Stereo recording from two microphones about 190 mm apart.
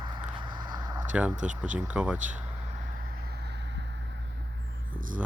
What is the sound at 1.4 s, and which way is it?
Speech, 40° right (ahead or behind).